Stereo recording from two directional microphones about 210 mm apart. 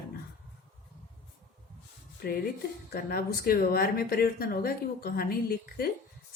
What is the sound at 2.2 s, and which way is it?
Speech, 45° left (ahead or behind).